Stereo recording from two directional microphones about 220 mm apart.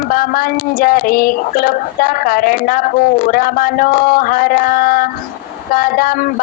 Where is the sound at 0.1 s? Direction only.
40° left (ahead or behind).